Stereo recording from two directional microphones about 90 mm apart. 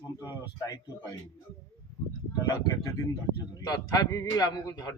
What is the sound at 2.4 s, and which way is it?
A man's voice, 45° left (ahead or behind).